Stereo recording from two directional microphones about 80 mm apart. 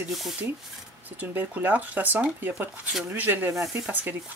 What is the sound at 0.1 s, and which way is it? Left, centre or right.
Speech, centre.